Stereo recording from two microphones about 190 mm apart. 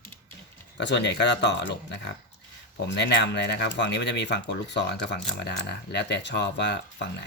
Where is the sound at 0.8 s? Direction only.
65° left (ahead or behind).